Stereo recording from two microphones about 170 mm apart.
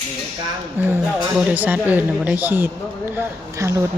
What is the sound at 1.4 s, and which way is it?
Speech, 10° right (ahead or behind).